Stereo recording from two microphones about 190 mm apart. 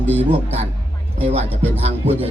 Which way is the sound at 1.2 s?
35° right (ahead or behind).